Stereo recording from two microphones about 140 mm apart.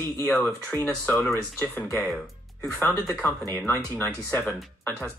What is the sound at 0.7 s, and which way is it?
Speech, 20° left (ahead or behind).